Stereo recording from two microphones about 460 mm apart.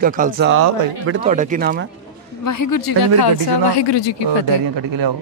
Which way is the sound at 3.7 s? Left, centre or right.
Left.